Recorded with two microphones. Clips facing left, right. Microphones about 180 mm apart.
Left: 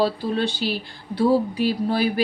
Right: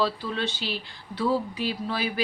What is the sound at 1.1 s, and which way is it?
Speech, 35° left (ahead or behind).